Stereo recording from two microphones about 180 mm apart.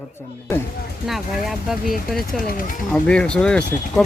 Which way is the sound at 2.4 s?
50° left (ahead or behind).